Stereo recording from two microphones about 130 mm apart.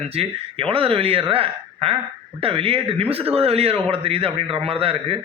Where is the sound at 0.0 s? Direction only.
45° right (ahead or behind).